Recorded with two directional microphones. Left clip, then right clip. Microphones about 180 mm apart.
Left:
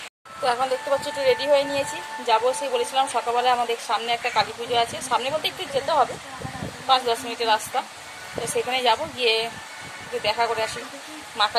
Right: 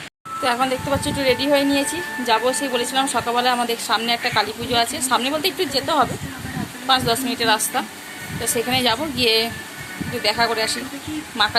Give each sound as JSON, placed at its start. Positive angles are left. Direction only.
{"t": 0.4, "sound": "a woman's voice", "side_deg": 0}